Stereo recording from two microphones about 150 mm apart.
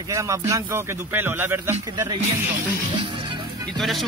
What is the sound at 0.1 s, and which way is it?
Speech, 20° right (ahead or behind).